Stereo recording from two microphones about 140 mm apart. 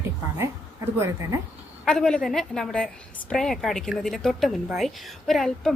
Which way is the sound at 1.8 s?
5° left (ahead or behind).